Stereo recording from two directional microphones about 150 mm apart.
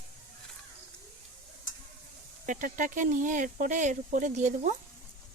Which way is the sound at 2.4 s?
60° right (ahead or behind).